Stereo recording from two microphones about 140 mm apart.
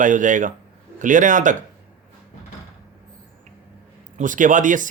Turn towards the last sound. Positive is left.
turn(degrees=-65)  # may be behind; listen again after turning